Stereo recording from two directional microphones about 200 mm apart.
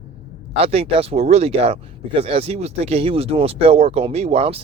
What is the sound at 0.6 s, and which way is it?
Speech, 30° right (ahead or behind).